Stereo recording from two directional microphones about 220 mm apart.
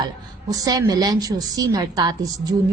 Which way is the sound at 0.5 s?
15° right (ahead or behind).